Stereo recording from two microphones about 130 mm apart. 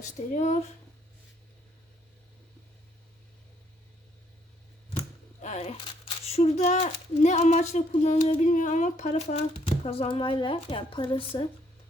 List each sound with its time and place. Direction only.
0.3 s speech: 70° left (ahead or behind)
5.4 s a sound: 60° left (ahead or behind)
5.8 s speech: 50° left (ahead or behind)